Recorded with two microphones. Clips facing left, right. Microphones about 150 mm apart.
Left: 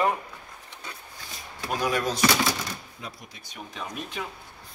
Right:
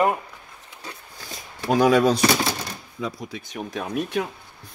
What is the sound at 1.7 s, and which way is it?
Speech, 75° right (ahead or behind).